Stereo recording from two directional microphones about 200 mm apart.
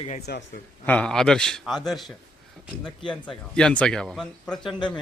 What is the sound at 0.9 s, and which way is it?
Speech, 5° left (ahead or behind).